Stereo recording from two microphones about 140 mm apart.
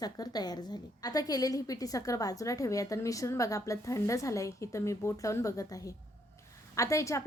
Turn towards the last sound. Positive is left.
turn(degrees=20)  # may be behind; listen again after turning